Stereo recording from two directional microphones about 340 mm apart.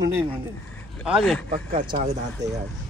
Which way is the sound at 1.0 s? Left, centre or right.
Centre.